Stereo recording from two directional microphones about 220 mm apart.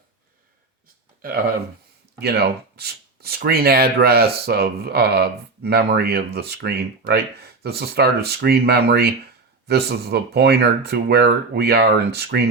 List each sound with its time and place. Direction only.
2.1 s speech: 45° right (ahead or behind)